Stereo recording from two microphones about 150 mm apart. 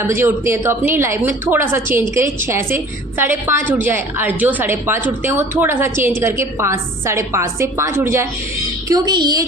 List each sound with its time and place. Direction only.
0.0 s a woman's voice: 15° right (ahead or behind)
8.9 s a woman's voice: 30° right (ahead or behind)